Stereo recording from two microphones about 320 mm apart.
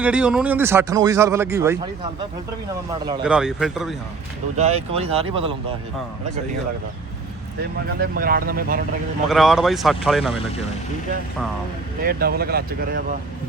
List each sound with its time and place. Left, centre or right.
0.0 s a man's voice: centre
3.2 s speech: centre
4.5 s a man's voice: right
7.9 s speech: right
9.3 s speech: centre
12.0 s speech: right